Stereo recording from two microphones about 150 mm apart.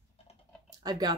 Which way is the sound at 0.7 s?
25° right (ahead or behind).